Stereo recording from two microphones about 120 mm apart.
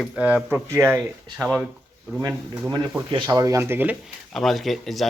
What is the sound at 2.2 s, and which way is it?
Speech, 25° right (ahead or behind).